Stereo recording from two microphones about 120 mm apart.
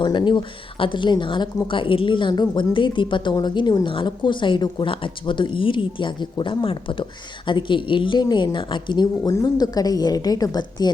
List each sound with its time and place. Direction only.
0.0 s a woman's voice: 40° left (ahead or behind)